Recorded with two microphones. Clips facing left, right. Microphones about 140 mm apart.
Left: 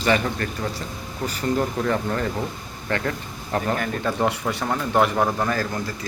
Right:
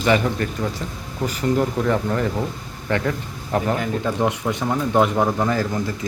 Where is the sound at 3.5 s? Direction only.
15° right (ahead or behind).